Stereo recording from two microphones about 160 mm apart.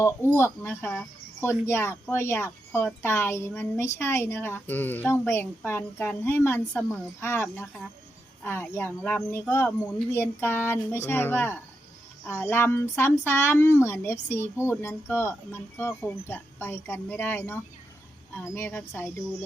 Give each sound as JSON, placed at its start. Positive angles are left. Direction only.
{"t": 0.0, "sound": "speech", "side_deg": 15}